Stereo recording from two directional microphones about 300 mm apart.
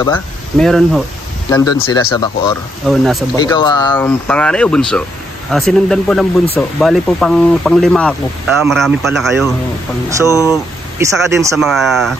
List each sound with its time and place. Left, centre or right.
0.0 s speech: centre
1.5 s speech: centre
2.9 s speech: centre
3.3 s speech: centre
10.2 s speech: centre
10.5 s speech: centre